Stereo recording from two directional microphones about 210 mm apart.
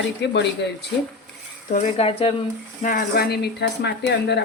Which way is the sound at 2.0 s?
25° left (ahead or behind).